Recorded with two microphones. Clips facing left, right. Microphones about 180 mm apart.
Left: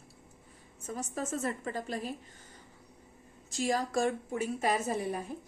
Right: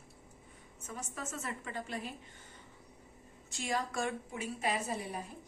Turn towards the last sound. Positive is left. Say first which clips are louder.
# left 5 dB
turn(degrees=50)  # may be behind; listen again after turning